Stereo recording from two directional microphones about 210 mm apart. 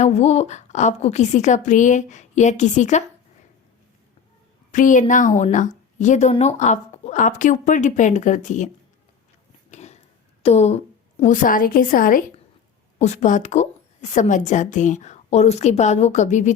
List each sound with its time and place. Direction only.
0.0 s a woman's voice: 30° left (ahead or behind)
4.7 s a woman's voice: 35° left (ahead or behind)
9.7 s a sound: 35° left (ahead or behind)
10.4 s a woman's voice: 30° left (ahead or behind)